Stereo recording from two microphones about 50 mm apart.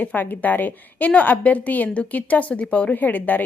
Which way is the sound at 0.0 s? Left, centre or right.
Left.